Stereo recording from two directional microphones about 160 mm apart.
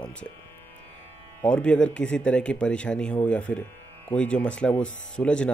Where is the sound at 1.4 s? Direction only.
5° left (ahead or behind).